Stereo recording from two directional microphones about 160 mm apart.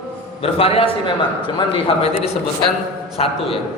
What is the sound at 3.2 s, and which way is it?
Speech, 40° left (ahead or behind).